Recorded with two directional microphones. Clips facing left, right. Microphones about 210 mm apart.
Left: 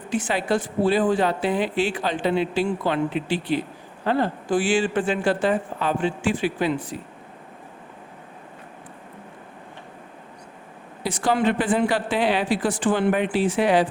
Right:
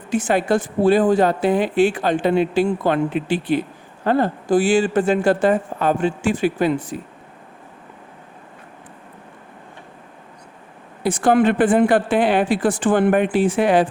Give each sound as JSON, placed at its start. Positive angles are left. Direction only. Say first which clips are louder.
{"t": 0.1, "sound": "speech", "louder": "right 5 dB", "side_deg": -45}
{"t": 11.0, "sound": "speech", "louder": "right 6 dB", "side_deg": -50}